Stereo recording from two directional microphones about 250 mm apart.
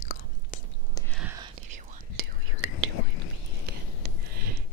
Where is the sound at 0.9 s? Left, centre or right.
Centre.